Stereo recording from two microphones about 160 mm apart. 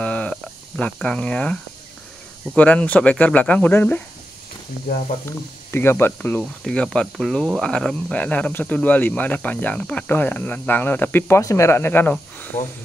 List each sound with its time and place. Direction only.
0.0 s a sound: 5° left (ahead or behind)
2.5 s speech: 10° left (ahead or behind)
5.7 s speech: 15° left (ahead or behind)